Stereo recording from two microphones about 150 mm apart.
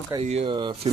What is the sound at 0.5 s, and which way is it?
Speech, 30° right (ahead or behind).